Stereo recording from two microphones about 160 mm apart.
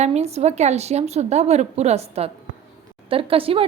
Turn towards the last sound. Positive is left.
turn(degrees=-35)  # may be behind; listen again after turning